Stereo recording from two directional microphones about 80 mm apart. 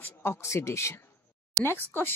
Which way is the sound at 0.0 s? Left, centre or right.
Left.